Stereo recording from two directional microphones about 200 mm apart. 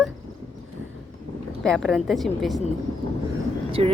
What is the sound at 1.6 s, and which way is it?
Speech, centre (ahead or behind).